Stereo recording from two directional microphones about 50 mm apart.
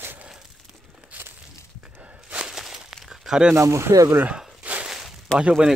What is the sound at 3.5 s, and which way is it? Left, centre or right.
Speech, right.